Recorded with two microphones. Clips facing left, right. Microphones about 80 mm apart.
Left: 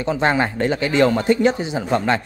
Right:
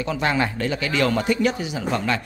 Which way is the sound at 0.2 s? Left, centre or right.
Left.